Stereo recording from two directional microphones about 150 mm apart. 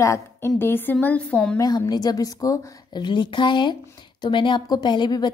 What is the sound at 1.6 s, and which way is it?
A woman's voice, 25° left (ahead or behind).